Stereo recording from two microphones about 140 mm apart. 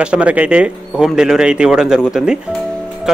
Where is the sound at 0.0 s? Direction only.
5° right (ahead or behind).